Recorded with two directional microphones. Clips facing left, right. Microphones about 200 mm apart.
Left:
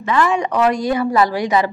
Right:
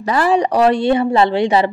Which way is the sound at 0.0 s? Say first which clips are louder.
Right 2 dB; 35° right (ahead or behind).